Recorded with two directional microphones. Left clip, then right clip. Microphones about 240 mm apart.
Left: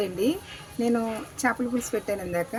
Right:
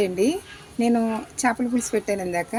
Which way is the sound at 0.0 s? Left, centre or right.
Right.